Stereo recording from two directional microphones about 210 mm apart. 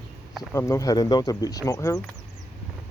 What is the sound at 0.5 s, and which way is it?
Speech, 15° left (ahead or behind).